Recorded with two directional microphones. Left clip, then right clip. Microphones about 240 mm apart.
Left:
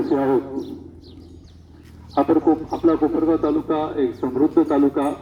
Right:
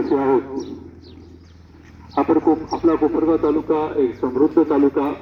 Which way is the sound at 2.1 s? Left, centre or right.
Left.